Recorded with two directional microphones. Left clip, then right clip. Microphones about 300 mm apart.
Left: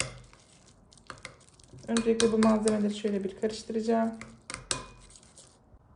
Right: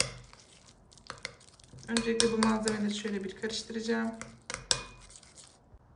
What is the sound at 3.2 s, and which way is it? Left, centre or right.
Speech, centre.